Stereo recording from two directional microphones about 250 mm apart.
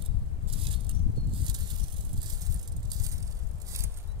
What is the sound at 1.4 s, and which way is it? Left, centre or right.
Snake, centre.